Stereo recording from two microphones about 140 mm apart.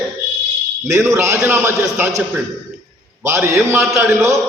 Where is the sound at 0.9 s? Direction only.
20° right (ahead or behind).